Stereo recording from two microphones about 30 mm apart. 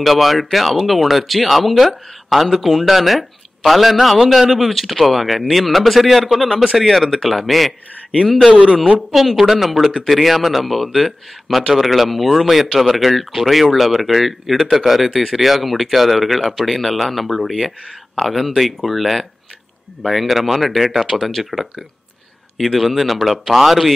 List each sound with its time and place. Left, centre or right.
0.0 s speech: centre
6.5 s speech: right
6.8 s speech: centre
8.5 s a man's voice: right
9.1 s speech: centre